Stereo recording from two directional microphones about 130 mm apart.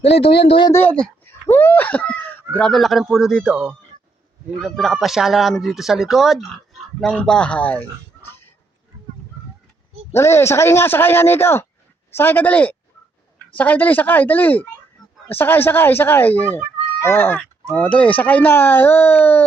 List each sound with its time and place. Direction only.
0.1 s speech: 45° left (ahead or behind)
0.7 s speech: 15° left (ahead or behind)
10.1 s speech: 20° left (ahead or behind)